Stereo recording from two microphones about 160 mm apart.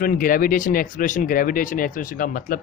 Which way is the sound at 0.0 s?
60° left (ahead or behind).